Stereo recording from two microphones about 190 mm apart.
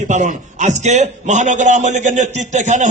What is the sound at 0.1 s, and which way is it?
A man's voice, 40° right (ahead or behind).